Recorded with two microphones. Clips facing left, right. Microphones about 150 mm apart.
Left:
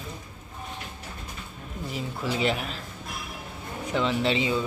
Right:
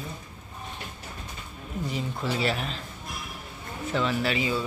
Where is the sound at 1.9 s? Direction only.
15° left (ahead or behind).